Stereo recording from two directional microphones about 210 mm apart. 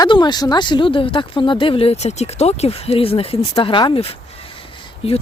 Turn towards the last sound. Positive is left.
turn(degrees=30)  # may be behind; listen again after turning